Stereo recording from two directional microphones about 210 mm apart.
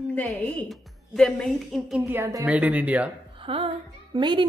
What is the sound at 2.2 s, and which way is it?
Speech, 15° right (ahead or behind).